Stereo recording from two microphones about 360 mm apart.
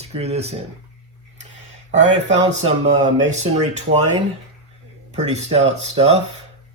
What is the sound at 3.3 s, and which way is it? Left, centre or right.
Speech, centre.